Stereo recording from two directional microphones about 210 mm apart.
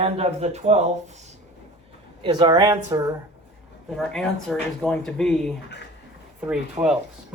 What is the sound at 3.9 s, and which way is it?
Speech, 5° left (ahead or behind).